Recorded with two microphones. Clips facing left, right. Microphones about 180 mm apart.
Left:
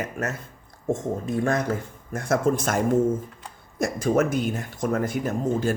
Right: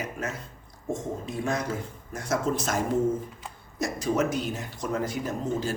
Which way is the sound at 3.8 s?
50° left (ahead or behind).